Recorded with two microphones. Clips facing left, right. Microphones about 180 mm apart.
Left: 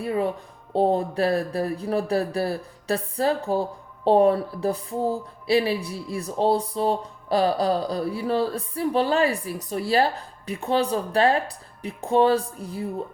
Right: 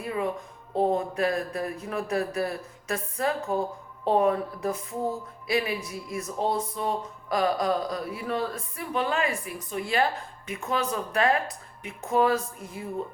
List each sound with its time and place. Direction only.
0.0 s speech: 35° left (ahead or behind)